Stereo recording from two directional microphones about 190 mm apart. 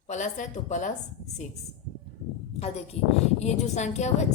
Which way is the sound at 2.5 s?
30° left (ahead or behind).